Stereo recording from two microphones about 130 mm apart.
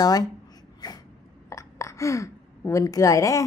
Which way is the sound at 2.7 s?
25° left (ahead or behind).